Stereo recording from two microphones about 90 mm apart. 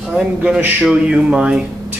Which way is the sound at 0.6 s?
20° right (ahead or behind).